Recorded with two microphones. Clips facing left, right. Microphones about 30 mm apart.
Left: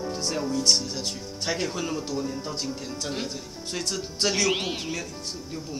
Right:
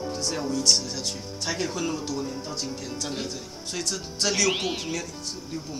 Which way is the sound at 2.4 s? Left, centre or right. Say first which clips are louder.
Left 1 dB; left.